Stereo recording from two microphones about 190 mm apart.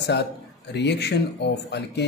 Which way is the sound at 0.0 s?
60° left (ahead or behind).